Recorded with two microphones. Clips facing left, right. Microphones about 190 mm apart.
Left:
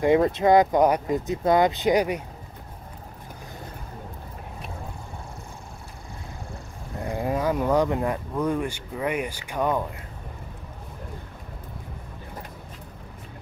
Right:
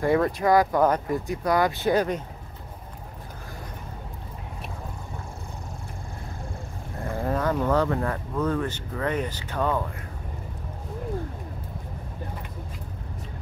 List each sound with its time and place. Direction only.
0.0 s speech: 20° left (ahead or behind)
7.0 s speech: 15° left (ahead or behind)